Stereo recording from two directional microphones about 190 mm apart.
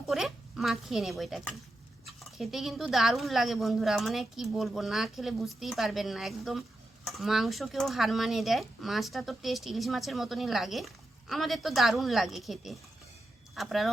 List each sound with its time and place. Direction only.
0.0 s speech: centre (ahead or behind)